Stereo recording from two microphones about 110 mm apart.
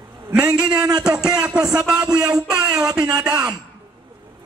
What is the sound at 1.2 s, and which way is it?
A man's voice, 5° right (ahead or behind).